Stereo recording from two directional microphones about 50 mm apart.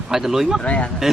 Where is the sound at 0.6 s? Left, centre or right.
Left.